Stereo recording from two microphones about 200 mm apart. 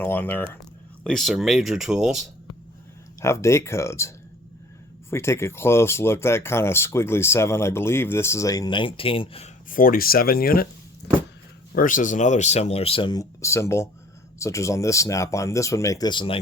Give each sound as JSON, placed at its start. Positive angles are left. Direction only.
{"t": 0.0, "sound": "speech", "side_deg": 10}
{"t": 3.2, "sound": "speech", "side_deg": 15}
{"t": 5.1, "sound": "speech", "side_deg": 15}
{"t": 9.6, "sound": "speech", "side_deg": 45}
{"t": 11.7, "sound": "speech", "side_deg": 45}